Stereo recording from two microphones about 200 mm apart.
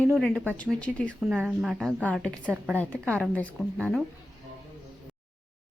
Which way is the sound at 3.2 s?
5° left (ahead or behind).